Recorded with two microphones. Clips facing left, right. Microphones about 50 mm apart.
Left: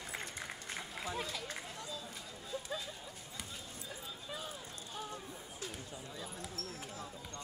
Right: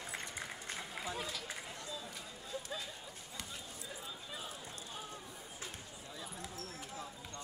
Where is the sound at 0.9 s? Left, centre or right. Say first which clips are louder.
Left 2 dB; centre.